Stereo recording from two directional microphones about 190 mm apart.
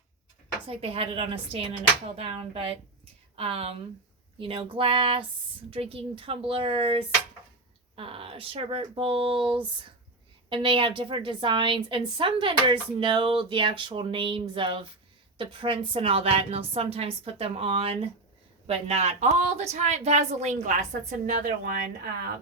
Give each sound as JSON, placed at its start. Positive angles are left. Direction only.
{"t": 0.7, "sound": "a woman's voice", "side_deg": -30}